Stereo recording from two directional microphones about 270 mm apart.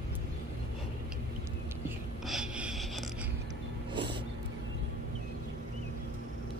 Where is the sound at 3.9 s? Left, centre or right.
Centre.